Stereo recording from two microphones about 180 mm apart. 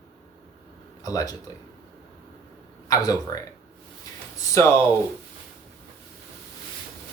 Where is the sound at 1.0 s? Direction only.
20° left (ahead or behind).